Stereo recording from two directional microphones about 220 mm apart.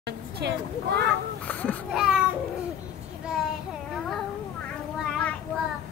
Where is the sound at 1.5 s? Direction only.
5° left (ahead or behind).